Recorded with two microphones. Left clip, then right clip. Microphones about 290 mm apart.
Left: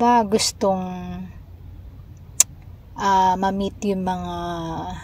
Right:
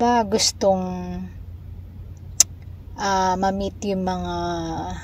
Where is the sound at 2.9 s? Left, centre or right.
Centre.